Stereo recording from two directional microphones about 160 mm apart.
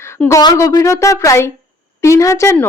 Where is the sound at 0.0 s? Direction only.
15° left (ahead or behind).